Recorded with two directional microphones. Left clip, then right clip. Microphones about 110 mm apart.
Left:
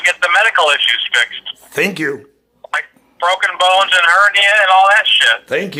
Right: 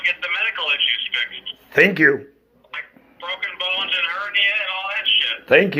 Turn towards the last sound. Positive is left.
turn(degrees=5)  # may be behind; listen again after turning